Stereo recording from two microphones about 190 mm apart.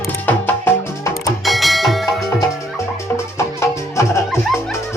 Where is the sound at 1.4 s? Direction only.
Centre (ahead or behind).